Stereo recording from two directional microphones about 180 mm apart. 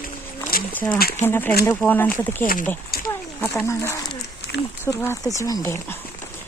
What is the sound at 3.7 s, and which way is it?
Speech, 15° left (ahead or behind).